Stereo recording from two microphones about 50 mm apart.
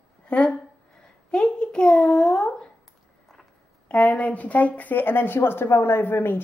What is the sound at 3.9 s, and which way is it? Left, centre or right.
Speech, left.